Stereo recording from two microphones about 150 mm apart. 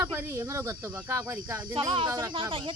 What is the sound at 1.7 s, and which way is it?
Speech, 35° right (ahead or behind).